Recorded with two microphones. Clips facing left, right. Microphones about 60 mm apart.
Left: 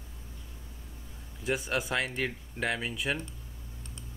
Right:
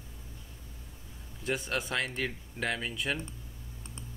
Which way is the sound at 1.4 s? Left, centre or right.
Centre.